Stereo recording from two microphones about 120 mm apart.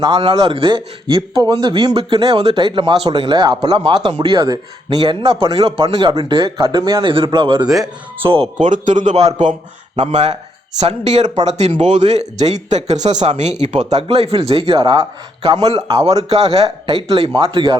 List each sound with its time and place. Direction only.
0.0 s a man's voice: 40° right (ahead or behind)
2.0 s speech: 45° right (ahead or behind)
7.1 s a man's voice: 45° right (ahead or behind)
8.5 s speech: 90° right; by 14.0 s 65° right (ahead or behind)
14.2 s a man's voice: 55° right (ahead or behind)
16.0 s a man's voice: 60° right (ahead or behind); by 17.7 s 45° right (ahead or behind)